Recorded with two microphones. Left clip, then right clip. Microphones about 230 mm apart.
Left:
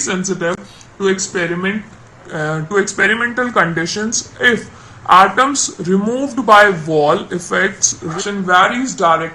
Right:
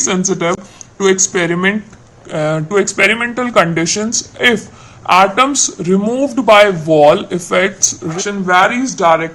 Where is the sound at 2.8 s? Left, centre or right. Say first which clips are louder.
Right 1 dB; right.